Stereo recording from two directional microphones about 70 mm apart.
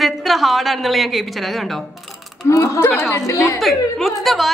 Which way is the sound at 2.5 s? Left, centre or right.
Left.